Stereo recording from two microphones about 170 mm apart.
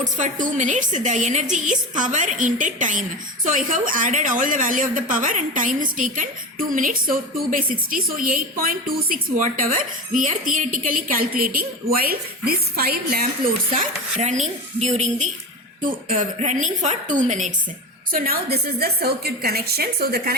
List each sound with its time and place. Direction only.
0.0 s a woman's voice: 50° right (ahead or behind)
14.2 s a woman's voice: 40° right (ahead or behind)
18.1 s speech: 65° right (ahead or behind)